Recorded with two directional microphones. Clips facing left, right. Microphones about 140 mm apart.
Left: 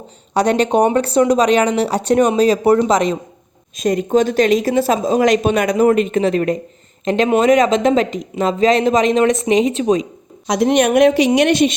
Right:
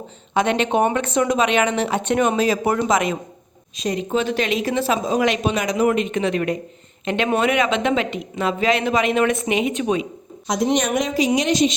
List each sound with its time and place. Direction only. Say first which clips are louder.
0.3 s speech: left 4 dB; 40° left (ahead or behind)
3.8 s speech: left 7 dB; 50° left (ahead or behind)
10.4 s a woman's voice: left 6 dB; 70° left (ahead or behind)